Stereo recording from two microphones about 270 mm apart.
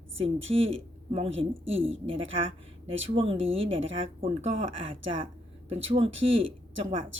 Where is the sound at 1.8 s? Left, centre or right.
Right.